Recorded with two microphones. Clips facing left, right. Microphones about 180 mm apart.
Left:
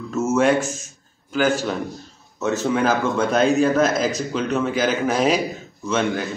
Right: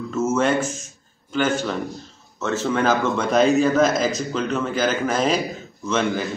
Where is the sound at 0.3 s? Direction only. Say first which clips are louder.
Left 4 dB; 5° left (ahead or behind).